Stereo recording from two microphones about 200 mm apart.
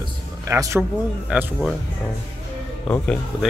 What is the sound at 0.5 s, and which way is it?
Speech, 15° right (ahead or behind).